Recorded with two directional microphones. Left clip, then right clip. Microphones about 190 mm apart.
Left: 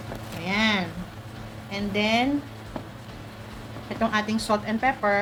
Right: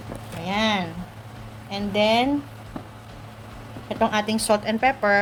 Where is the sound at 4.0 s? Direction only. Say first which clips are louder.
Right 3 dB; 45° right (ahead or behind).